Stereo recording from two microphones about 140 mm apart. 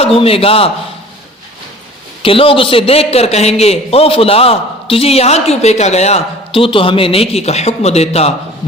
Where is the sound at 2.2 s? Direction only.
40° left (ahead or behind).